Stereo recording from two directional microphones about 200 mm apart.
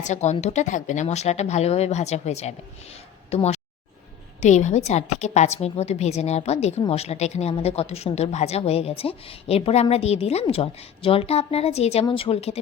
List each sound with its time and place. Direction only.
0.0 s a woman's voice: 35° left (ahead or behind)
3.2 s a sound: 35° left (ahead or behind)
4.4 s a woman's voice: 35° left (ahead or behind)